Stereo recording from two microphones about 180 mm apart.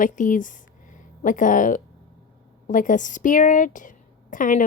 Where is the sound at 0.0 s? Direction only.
45° left (ahead or behind).